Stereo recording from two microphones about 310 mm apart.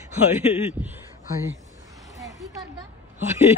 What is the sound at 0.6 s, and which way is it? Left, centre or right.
Speech, centre.